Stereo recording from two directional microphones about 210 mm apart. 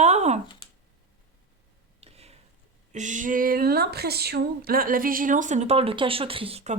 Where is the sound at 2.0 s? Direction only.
30° right (ahead or behind).